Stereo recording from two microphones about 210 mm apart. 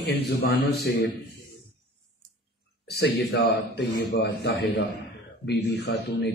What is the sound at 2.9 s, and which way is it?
A man's voice, 50° left (ahead or behind).